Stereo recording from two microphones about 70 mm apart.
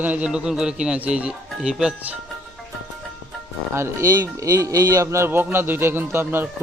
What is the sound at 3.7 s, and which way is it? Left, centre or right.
Speech, right.